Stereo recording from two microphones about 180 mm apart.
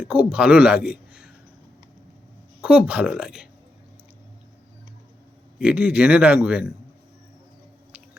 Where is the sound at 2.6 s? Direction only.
5° right (ahead or behind).